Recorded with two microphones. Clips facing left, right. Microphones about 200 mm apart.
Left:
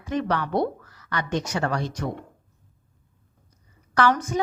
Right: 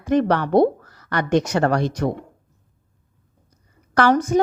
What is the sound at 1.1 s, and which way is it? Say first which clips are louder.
A woman's voice: right 8 dB; 70° right (ahead or behind).